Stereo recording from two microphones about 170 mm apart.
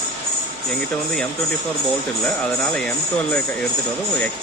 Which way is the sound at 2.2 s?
10° left (ahead or behind).